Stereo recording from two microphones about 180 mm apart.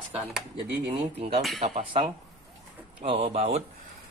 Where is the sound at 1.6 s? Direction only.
35° right (ahead or behind).